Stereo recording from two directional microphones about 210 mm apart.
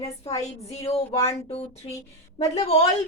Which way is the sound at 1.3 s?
30° left (ahead or behind).